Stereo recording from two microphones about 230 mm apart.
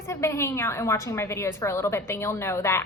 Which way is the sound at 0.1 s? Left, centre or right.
Centre.